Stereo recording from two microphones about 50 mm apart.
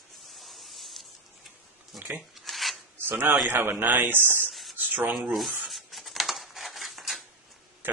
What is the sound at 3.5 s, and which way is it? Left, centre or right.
A man's voice, right.